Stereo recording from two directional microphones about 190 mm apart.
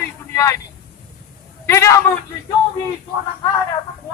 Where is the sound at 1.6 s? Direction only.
15° left (ahead or behind).